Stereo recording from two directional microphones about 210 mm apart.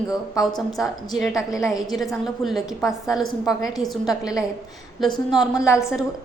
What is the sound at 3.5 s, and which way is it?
Speech, 15° left (ahead or behind).